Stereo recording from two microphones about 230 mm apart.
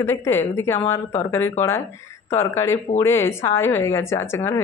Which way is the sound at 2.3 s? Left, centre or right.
Centre.